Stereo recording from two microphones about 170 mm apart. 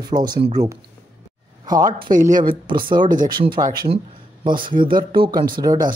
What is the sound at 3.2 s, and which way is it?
Speech, 25° right (ahead or behind).